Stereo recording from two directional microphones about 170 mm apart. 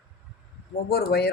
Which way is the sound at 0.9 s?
65° left (ahead or behind).